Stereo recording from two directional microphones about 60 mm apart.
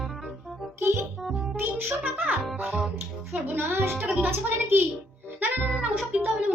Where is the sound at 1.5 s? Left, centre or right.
Right.